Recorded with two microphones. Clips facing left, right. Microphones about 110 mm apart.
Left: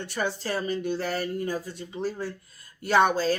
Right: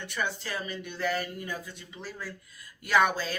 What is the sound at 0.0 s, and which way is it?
Speech, 35° left (ahead or behind).